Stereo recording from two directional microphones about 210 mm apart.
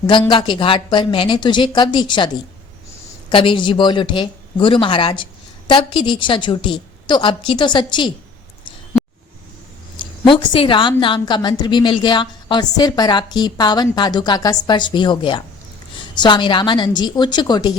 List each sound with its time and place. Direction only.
0.1 s speech: 25° left (ahead or behind)
10.0 s speech: 25° left (ahead or behind)